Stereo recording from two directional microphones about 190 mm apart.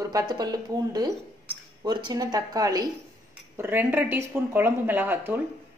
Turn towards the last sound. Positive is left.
turn(degrees=-10)  # may be behind; listen again after turning